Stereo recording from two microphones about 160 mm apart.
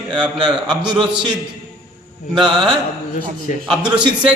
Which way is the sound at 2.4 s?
30° right (ahead or behind).